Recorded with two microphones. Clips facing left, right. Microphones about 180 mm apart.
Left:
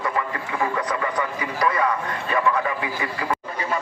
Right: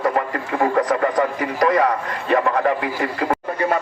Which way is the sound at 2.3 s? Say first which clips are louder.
Right 5 dB; 55° right (ahead or behind).